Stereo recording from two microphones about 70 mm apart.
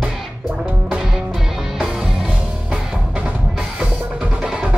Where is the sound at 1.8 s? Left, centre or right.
Centre.